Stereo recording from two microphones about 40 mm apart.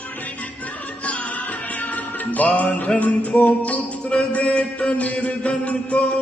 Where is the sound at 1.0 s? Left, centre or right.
Left.